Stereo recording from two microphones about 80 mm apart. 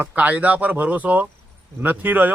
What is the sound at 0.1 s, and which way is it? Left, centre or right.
A man's voice, centre.